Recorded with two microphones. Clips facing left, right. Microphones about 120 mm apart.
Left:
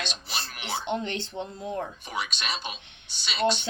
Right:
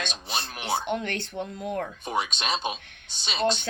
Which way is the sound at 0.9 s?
25° left (ahead or behind).